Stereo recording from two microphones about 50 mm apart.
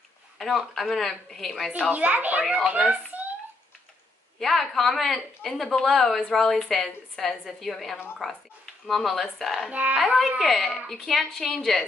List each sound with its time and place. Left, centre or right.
0.4 s a woman's voice: centre
1.9 s a child's voice: right
2.9 s a sound: right
4.4 s a woman's voice: centre
9.7 s a child's voice: right
9.9 s a woman's voice: centre